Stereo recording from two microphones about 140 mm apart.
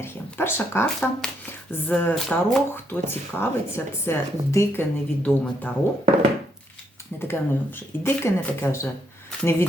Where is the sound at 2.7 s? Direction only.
15° left (ahead or behind).